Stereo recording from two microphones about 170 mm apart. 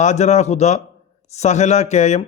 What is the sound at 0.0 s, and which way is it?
A man's voice, 45° left (ahead or behind).